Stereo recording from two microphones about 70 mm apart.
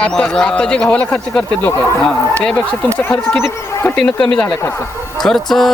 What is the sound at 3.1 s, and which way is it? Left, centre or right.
Speech, left.